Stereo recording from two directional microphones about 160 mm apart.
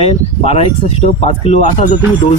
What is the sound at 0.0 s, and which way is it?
Speech, 40° left (ahead or behind).